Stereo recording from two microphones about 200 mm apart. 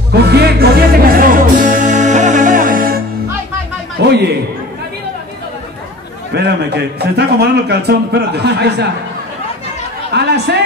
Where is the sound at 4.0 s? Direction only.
55° right (ahead or behind).